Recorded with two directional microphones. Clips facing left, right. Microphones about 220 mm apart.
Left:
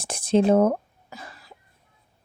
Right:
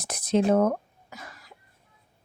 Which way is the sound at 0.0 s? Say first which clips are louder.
Left 3 dB; 30° left (ahead or behind).